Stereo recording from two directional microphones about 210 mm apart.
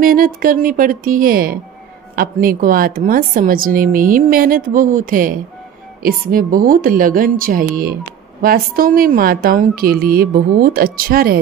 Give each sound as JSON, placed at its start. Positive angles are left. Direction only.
{"t": 0.0, "sound": "a woman's voice", "side_deg": -45}